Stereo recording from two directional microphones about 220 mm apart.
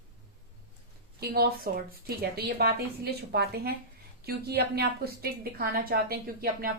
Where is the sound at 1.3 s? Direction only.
45° right (ahead or behind).